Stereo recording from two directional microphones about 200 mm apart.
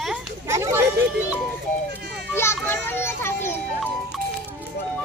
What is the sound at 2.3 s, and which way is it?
A child's voice, 10° left (ahead or behind).